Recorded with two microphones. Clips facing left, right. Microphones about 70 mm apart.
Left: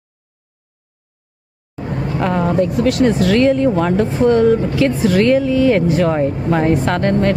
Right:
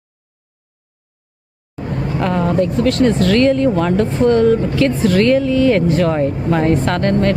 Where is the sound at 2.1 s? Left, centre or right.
Left.